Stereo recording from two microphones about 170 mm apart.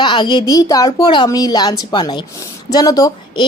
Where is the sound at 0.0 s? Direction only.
30° left (ahead or behind).